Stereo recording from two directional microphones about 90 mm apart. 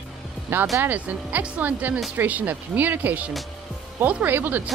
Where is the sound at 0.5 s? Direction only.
20° right (ahead or behind).